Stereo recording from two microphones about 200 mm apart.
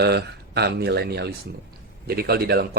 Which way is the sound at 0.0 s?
55° right (ahead or behind).